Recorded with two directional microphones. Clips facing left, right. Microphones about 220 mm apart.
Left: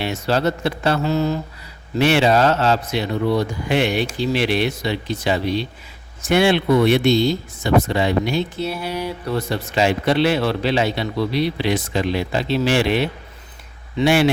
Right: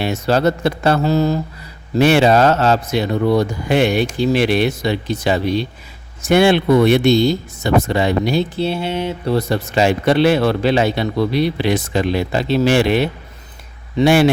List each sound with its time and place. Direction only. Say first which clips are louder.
0.0 s speech: right 4 dB; 45° right (ahead or behind)